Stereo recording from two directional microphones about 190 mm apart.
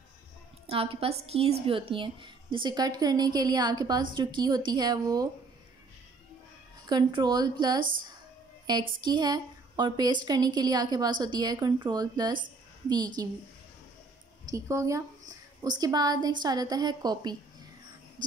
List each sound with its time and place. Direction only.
0.7 s a woman's voice: 30° right (ahead or behind)
6.9 s a woman's voice: 25° right (ahead or behind)
14.4 s a woman's voice: 15° right (ahead or behind)